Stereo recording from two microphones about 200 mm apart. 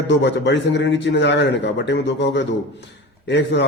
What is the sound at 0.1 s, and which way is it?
A man's voice, 60° left (ahead or behind).